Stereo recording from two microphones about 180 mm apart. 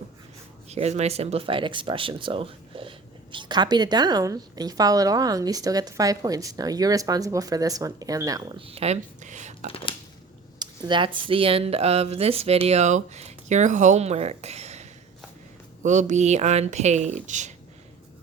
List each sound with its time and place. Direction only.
0.7 s a woman's voice: 35° right (ahead or behind); by 8.6 s 20° right (ahead or behind)
8.6 s speech: 35° right (ahead or behind)
10.6 s speech: 25° right (ahead or behind); by 17.5 s 40° right (ahead or behind)